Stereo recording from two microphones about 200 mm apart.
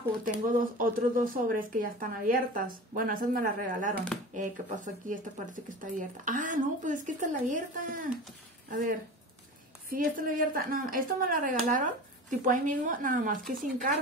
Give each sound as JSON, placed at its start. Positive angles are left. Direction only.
{"t": 0.2, "sound": "speech", "side_deg": -45}